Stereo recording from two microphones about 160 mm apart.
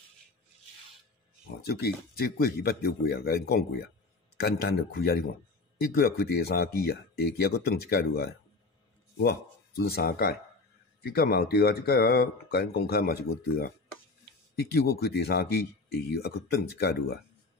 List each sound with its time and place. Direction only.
1.6 s speech: 80° left
16.7 s speech: 85° left